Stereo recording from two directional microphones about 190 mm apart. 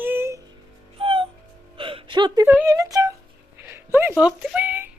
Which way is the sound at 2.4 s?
15° right (ahead or behind).